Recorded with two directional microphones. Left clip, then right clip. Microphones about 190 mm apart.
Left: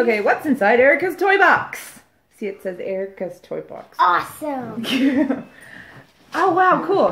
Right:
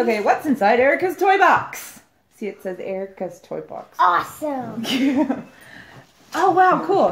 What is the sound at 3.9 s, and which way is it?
Speech, 20° left (ahead or behind).